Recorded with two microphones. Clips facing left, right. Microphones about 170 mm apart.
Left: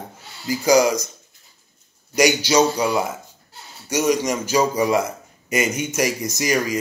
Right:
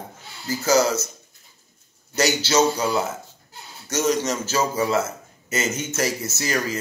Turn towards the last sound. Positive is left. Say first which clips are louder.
# left 4 dB
turn(degrees=15)  # may be behind; listen again after turning